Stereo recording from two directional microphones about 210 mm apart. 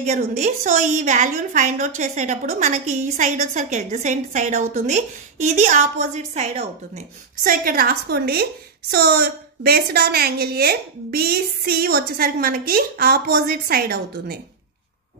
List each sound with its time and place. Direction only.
0.0 s a woman's voice: 35° right (ahead or behind)
7.4 s a woman's voice: 45° right (ahead or behind)